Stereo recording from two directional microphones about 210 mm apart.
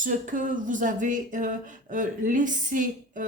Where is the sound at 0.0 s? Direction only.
40° right (ahead or behind).